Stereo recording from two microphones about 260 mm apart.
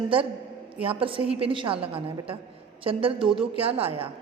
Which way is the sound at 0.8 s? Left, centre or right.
Right.